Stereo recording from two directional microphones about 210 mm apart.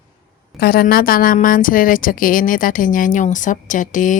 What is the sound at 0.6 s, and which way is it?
A woman's voice, 45° left (ahead or behind).